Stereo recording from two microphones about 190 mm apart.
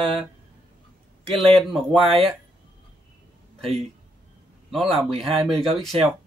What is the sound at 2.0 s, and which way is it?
Speech, 30° right (ahead or behind).